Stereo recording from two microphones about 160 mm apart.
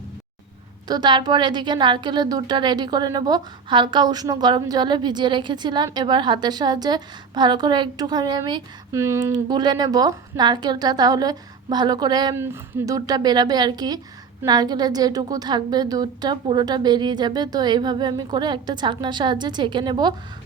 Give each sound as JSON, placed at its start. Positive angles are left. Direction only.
{"t": 0.9, "sound": "a woman's voice", "side_deg": -25}
{"t": 12.4, "sound": "a woman's voice", "side_deg": -15}